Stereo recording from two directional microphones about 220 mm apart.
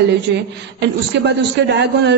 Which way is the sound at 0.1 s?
50° right (ahead or behind).